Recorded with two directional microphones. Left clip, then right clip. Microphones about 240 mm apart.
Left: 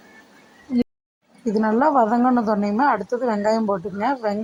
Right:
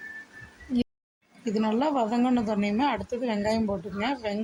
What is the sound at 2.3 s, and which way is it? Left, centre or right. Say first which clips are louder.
Speech: left 7 dB; centre.